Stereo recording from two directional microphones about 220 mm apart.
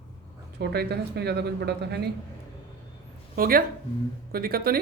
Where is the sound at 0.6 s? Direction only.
50° right (ahead or behind).